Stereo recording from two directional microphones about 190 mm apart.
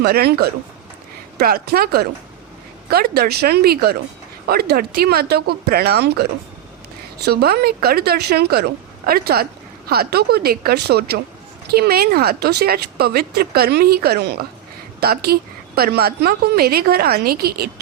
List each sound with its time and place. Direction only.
0.0 s a woman's voice: 55° right (ahead or behind)
7.3 s a woman's voice: 55° right (ahead or behind)